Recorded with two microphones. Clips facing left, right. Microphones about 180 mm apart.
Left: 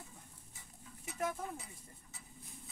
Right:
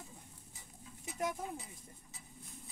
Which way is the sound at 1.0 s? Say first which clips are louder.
Even; 15° right (ahead or behind).